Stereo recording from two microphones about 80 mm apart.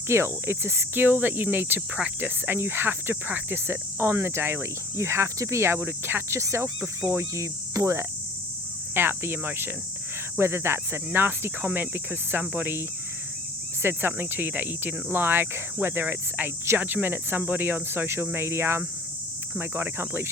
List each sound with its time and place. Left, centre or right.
0.1 s speech: right
9.0 s speech: right
13.8 s speech: right